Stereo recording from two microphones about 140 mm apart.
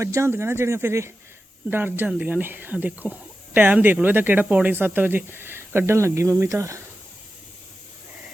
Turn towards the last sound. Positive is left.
turn(degrees=-20)  # may be behind; listen again after turning